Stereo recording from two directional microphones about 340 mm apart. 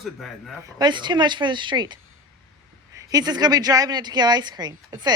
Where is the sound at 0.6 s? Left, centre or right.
Centre.